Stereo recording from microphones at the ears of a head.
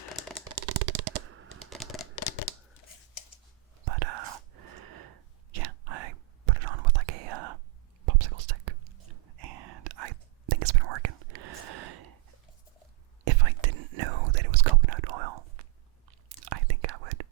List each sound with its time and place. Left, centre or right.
0.5 s shuffling cards: right
2.1 s a sound: left
3.8 s whispering: right